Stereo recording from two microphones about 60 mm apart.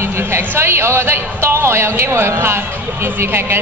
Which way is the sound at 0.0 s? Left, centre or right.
Right.